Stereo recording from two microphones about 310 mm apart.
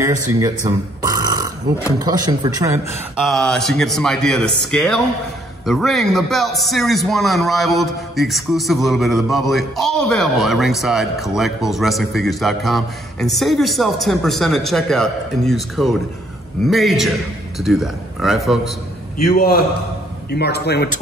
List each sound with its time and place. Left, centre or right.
0.4 s burping: centre
2.0 s speech: centre
3.3 s a man's voice: centre
19.1 s a man's voice: left